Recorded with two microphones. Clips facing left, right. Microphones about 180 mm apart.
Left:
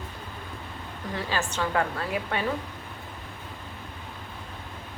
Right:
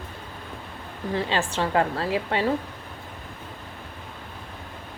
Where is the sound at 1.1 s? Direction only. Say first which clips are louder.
Right 4 dB; 30° right (ahead or behind).